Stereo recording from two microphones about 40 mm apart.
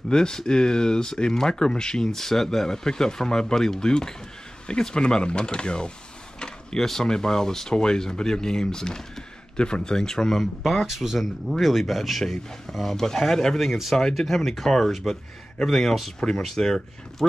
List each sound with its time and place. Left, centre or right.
0.1 s speech: centre
6.4 s a sound: centre
6.9 s speech: centre
10.6 s speech: centre